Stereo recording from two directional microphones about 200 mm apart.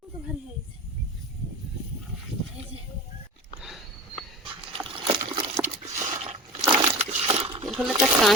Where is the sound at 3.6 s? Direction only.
Centre (ahead or behind).